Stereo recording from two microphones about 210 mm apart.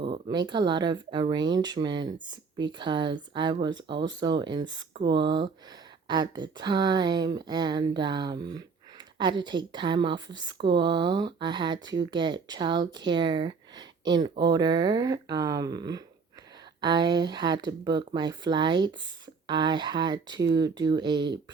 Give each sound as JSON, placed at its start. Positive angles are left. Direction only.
{"t": 0.0, "sound": "speech", "side_deg": -20}